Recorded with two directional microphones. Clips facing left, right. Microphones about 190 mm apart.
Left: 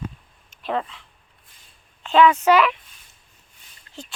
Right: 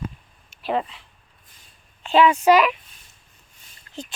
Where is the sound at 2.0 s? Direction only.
15° right (ahead or behind).